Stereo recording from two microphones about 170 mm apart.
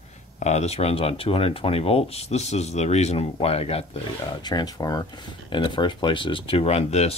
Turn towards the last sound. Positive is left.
turn(degrees=40)  # may be behind; listen again after turning